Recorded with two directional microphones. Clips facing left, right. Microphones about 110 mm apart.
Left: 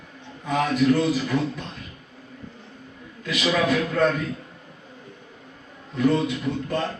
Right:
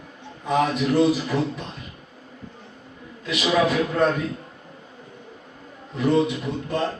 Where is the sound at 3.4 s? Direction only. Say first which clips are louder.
Right 2 dB; 15° right (ahead or behind).